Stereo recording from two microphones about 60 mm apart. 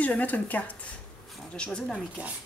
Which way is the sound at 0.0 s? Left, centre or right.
Left.